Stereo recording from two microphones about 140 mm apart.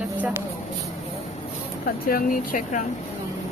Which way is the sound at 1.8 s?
90° left.